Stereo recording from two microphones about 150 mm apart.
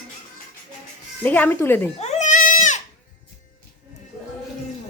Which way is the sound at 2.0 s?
50° left (ahead or behind).